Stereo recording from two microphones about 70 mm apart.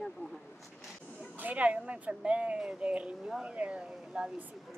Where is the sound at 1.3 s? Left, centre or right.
Right.